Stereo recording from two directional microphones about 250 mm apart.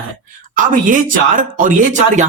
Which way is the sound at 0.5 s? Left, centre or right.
Right.